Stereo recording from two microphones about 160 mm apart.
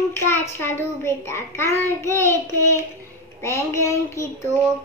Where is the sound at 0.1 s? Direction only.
15° left (ahead or behind).